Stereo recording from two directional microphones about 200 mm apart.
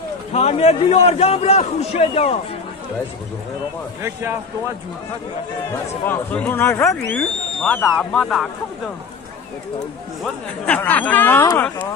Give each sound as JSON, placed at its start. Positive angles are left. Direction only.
{"t": 0.3, "sound": "a man's voice", "side_deg": 30}
{"t": 4.0, "sound": "speech", "side_deg": -15}
{"t": 6.0, "sound": "speech", "side_deg": 10}
{"t": 10.2, "sound": "speech", "side_deg": 10}